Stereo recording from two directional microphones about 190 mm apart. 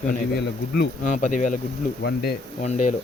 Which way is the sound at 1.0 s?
40° left (ahead or behind).